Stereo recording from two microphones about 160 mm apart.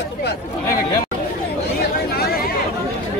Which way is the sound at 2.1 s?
80° left.